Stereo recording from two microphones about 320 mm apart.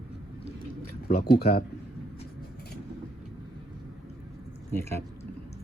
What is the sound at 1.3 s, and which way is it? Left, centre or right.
Speech, left.